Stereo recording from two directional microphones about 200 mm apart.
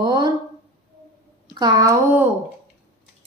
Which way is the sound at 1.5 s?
20° right (ahead or behind).